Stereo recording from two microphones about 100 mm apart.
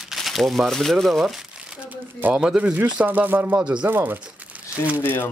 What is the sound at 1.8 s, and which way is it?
A man's voice, 10° right (ahead or behind).